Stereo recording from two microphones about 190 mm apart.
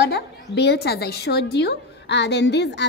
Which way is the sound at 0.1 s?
60° left (ahead or behind).